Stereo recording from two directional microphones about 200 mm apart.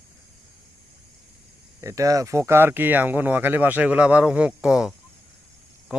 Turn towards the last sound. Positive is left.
turn(degrees=-5)  # may be behind; listen again after turning